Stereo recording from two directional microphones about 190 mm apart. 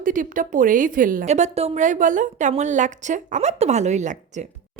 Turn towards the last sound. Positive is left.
turn(degrees=-40)  # may be behind; listen again after turning